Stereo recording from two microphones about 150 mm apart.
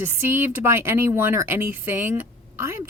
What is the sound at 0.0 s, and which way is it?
Speech, 15° right (ahead or behind).